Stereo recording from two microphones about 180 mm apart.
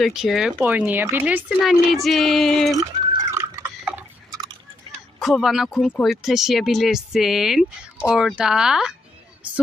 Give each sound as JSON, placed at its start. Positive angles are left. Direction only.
{"t": 0.0, "sound": "speech", "side_deg": 0}
{"t": 2.9, "sound": "drip", "side_deg": -25}
{"t": 3.3, "sound": "a sound", "side_deg": -15}
{"t": 5.2, "sound": "speech", "side_deg": 0}